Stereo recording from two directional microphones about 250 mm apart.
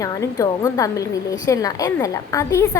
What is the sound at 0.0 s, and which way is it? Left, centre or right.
A woman's voice, centre.